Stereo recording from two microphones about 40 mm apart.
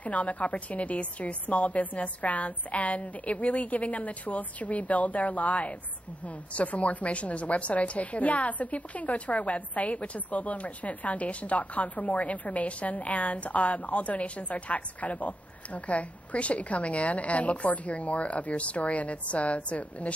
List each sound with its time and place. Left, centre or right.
0.0 s a woman's voice: left